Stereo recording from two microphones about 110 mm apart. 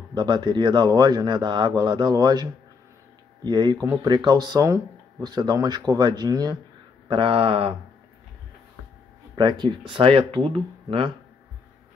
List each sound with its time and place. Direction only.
0.1 s a man's voice: 40° right (ahead or behind)
7.1 s speech: 50° right (ahead or behind)
9.3 s speech: 45° right (ahead or behind)